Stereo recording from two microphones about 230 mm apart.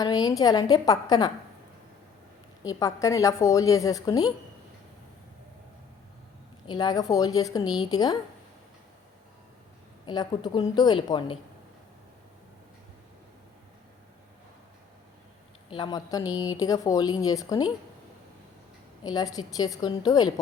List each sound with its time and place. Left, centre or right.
0.0 s a woman's voice: centre
2.6 s a woman's voice: centre
6.7 s a woman's voice: centre
10.1 s a woman's voice: centre
15.7 s a woman's voice: centre
19.0 s a woman's voice: centre